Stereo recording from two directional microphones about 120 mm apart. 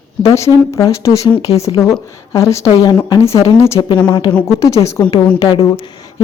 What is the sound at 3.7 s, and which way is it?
Speech, 40° left (ahead or behind).